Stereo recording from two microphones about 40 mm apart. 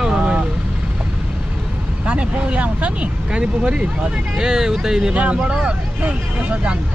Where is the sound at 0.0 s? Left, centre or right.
Right.